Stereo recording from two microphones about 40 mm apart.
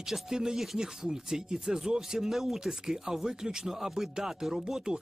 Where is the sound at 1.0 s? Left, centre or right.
Centre.